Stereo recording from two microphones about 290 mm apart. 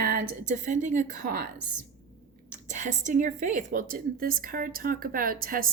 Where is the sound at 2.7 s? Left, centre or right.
Right.